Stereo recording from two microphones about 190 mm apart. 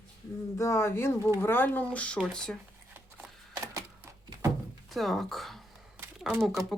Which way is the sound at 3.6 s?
15° right (ahead or behind).